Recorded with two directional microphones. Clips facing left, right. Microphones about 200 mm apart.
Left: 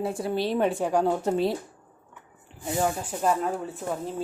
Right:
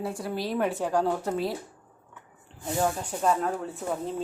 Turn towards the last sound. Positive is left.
turn(degrees=0)  # may be behind; listen again after turning